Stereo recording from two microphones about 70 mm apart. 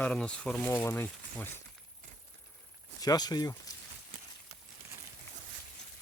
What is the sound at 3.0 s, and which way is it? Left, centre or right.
Speech, left.